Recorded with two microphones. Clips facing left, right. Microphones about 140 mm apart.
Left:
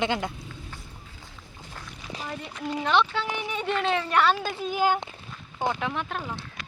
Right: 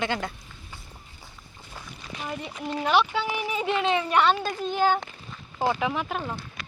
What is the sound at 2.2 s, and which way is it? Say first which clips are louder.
Speech: right 1 dB; 5° right (ahead or behind).